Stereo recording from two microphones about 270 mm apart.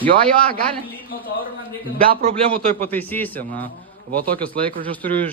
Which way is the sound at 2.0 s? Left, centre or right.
Right.